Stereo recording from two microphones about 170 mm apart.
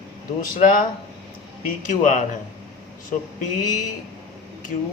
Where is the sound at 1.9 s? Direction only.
50° left (ahead or behind).